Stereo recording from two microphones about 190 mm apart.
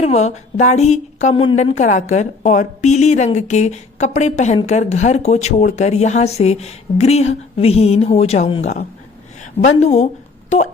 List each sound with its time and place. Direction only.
0.0 s a woman's voice: 35° left (ahead or behind)